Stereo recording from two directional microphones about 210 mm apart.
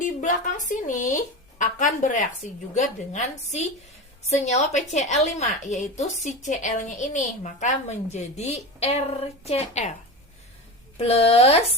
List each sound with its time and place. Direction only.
0.0 s a woman's voice: 35° left (ahead or behind)
10.9 s speech: 25° left (ahead or behind)